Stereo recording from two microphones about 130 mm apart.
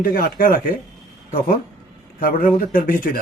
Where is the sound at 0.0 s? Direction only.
90° left.